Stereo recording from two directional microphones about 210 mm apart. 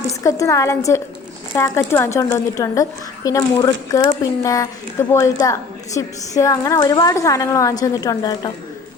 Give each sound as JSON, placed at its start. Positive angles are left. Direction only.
{"t": 0.2, "sound": "speech", "side_deg": 15}